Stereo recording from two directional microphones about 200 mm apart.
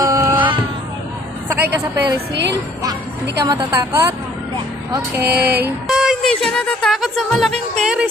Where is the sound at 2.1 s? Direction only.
60° right (ahead or behind).